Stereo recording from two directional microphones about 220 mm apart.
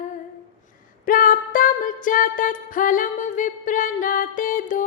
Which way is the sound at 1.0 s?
40° left (ahead or behind).